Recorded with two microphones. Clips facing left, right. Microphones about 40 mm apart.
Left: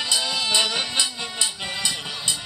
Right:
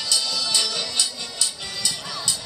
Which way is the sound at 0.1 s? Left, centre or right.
Left.